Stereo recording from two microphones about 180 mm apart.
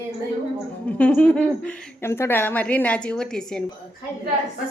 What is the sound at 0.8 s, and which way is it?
Speech, 5° left (ahead or behind).